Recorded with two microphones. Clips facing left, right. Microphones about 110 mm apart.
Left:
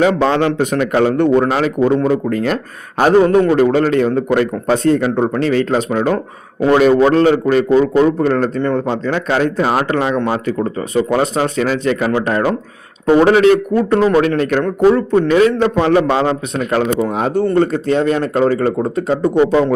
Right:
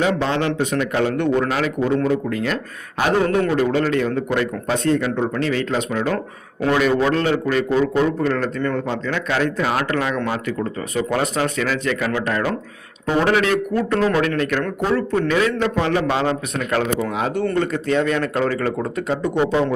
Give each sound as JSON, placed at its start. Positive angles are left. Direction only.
{"t": 0.0, "sound": "a man's voice", "side_deg": 55}
{"t": 15.4, "sound": "a man's voice", "side_deg": 40}
{"t": 17.1, "sound": "a man's voice", "side_deg": 40}